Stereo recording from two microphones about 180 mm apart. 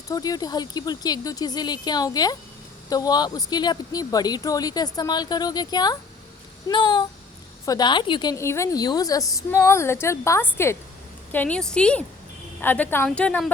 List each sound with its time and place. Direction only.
0.1 s a woman's voice: 20° left (ahead or behind)